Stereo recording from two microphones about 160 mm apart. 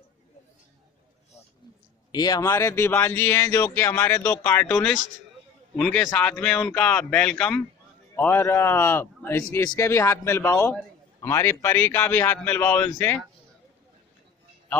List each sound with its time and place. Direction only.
2.1 s a man's voice: 25° left (ahead or behind)